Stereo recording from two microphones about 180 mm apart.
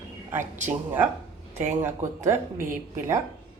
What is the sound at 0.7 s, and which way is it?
Speech, 10° right (ahead or behind).